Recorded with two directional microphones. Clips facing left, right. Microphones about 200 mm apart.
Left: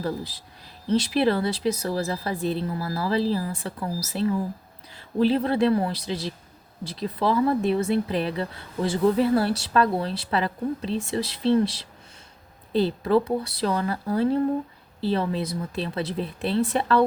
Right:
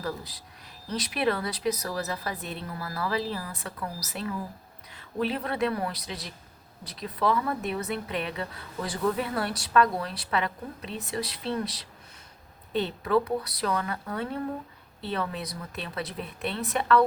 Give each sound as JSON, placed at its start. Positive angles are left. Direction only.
{"t": 0.0, "sound": "speech", "side_deg": 30}